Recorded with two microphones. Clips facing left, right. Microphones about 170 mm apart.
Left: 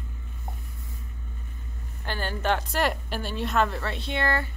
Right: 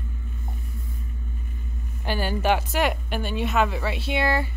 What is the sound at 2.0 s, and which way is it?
A woman's voice, 10° right (ahead or behind).